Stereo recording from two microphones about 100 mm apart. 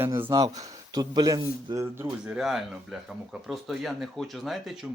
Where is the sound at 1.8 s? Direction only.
25° right (ahead or behind).